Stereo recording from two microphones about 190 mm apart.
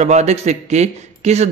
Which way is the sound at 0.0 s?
35° right (ahead or behind).